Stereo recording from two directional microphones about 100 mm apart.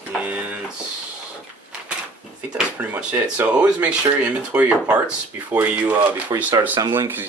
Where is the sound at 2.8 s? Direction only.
15° right (ahead or behind).